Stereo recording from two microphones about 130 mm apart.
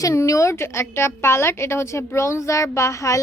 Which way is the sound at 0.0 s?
25° left (ahead or behind).